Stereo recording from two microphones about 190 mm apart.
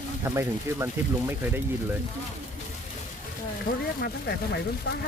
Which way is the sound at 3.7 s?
45° left (ahead or behind).